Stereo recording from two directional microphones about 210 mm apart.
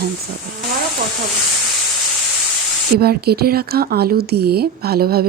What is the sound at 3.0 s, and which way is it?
Speech, 50° right (ahead or behind).